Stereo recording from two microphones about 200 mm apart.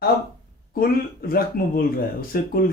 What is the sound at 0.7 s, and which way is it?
Speech, 50° left (ahead or behind).